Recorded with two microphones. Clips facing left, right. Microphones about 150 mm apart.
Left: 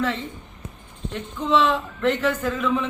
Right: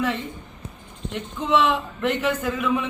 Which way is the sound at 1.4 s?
15° right (ahead or behind).